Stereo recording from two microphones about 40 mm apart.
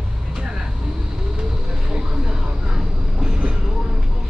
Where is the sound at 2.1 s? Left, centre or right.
Centre.